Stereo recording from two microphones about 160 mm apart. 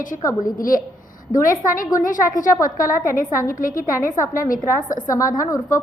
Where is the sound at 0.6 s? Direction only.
60° left (ahead or behind).